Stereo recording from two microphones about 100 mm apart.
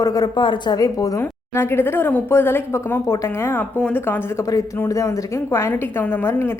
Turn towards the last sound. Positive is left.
turn(degrees=25)  # may be behind; listen again after turning